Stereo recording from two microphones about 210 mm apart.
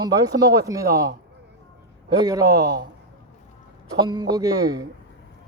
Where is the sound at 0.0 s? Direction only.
15° right (ahead or behind).